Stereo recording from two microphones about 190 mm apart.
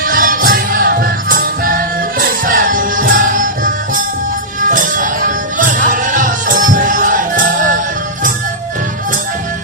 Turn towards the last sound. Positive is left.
turn(degrees=-45)  # may be behind; listen again after turning